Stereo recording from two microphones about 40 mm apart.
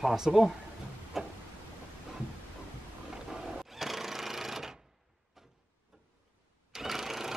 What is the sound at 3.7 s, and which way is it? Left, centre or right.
Jackhammer, centre.